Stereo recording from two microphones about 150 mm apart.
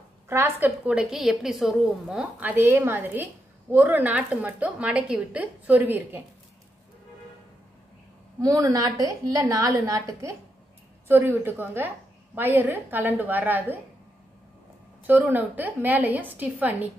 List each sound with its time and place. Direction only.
0.3 s a woman's voice: 15° right (ahead or behind)
8.4 s a woman's voice: 25° right (ahead or behind)
15.0 s a woman's voice: 10° right (ahead or behind)